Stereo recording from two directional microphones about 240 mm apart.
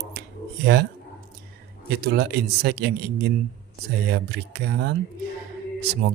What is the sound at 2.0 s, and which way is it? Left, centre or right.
Speech, right.